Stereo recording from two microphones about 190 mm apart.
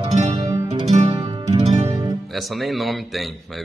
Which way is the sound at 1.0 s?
35° right (ahead or behind).